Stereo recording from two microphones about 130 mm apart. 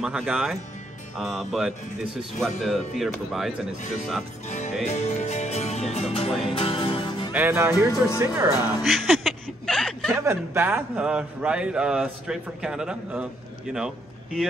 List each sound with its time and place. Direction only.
0.0 s a man's voice: 10° right (ahead or behind)
4.5 s music: 65° left (ahead or behind); by 7.2 s 40° left (ahead or behind)
7.3 s a man's voice: 15° right (ahead or behind)
8.8 s chuckle: centre (ahead or behind)
10.2 s a man's voice: 20° right (ahead or behind)